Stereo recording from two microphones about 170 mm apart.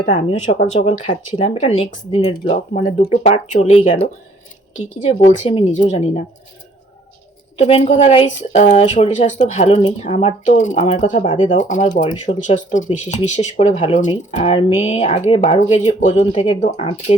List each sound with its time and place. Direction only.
0.0 s speech: 40° left (ahead or behind)
7.6 s speech: 45° left (ahead or behind)